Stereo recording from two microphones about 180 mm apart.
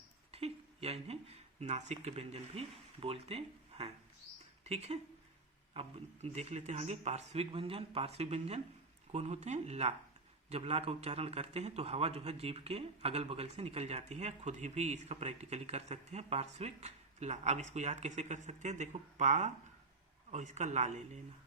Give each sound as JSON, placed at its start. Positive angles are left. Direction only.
{"t": 0.3, "sound": "speech", "side_deg": -35}
{"t": 6.2, "sound": "a man's voice", "side_deg": -35}